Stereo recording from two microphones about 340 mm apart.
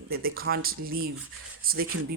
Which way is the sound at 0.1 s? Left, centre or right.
Right.